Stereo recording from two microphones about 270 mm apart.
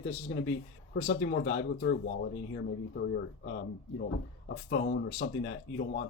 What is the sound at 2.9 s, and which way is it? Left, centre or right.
Speech, left.